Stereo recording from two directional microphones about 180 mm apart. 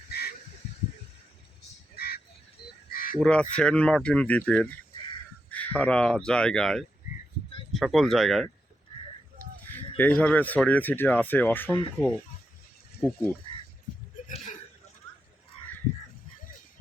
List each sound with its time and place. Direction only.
2.0 s frog: 60° left (ahead or behind)
2.9 s caw: 55° left (ahead or behind)
3.2 s speech: 5° left (ahead or behind)
10.0 s speech: 5° left (ahead or behind)
14.3 s a sound: 45° left (ahead or behind)